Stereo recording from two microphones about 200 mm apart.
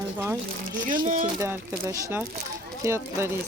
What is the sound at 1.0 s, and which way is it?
Speech, 40° right (ahead or behind).